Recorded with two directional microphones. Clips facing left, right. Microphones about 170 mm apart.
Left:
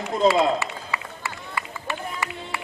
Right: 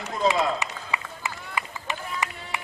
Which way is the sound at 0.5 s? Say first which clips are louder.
Left 2 dB; 15° right (ahead or behind).